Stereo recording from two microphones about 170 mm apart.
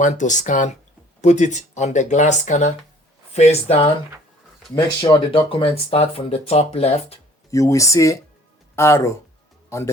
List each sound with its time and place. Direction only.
0.0 s speech: 45° left (ahead or behind)
7.5 s speech: 20° left (ahead or behind)